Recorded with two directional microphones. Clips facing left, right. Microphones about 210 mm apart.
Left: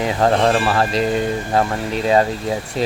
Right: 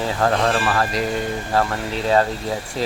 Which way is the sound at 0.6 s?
30° left (ahead or behind).